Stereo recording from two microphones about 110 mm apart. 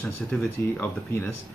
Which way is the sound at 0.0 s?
10° left (ahead or behind).